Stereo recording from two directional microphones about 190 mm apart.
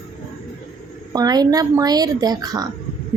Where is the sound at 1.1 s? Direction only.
20° right (ahead or behind).